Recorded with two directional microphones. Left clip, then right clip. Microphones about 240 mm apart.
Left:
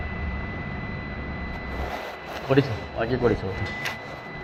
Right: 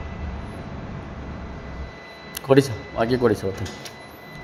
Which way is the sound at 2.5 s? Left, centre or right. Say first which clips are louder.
Right 5 dB; right.